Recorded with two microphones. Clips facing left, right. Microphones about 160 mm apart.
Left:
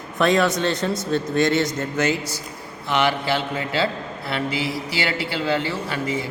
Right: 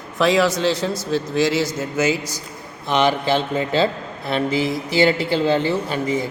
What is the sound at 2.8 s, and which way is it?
Speech, 20° right (ahead or behind).